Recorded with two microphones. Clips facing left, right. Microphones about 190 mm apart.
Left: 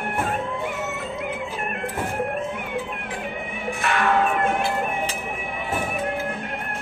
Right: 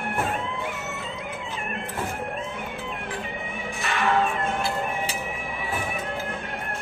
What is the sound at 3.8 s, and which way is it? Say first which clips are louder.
Cat: left 2 dB; 60° left (ahead or behind).